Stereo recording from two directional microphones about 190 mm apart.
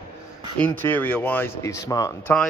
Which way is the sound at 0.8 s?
10° left (ahead or behind).